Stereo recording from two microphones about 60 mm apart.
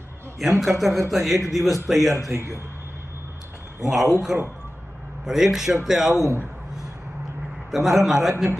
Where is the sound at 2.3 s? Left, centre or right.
Right.